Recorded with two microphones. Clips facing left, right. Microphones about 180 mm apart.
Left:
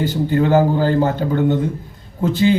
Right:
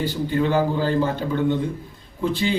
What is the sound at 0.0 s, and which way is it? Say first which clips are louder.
A man's voice: left 5 dB; 45° left (ahead or behind).